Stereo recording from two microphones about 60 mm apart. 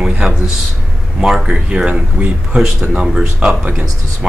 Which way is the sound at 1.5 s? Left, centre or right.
Centre.